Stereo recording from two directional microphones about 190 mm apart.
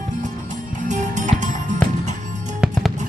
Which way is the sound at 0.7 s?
40° right (ahead or behind).